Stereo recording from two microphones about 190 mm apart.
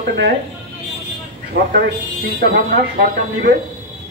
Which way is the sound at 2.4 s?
50° right (ahead or behind).